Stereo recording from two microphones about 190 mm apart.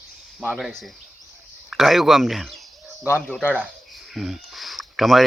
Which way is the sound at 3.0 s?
10° left (ahead or behind).